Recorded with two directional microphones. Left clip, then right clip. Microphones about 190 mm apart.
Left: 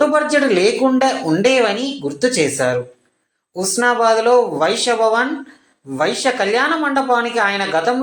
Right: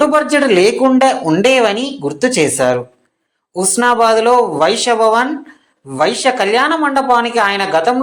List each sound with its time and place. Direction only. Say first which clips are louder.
0.0 s speech: right 3 dB; 30° right (ahead or behind)